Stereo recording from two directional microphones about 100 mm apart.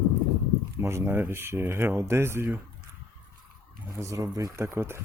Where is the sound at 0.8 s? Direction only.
25° right (ahead or behind).